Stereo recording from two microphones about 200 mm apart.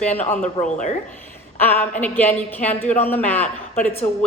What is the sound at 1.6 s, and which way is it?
A woman's voice, 10° left (ahead or behind).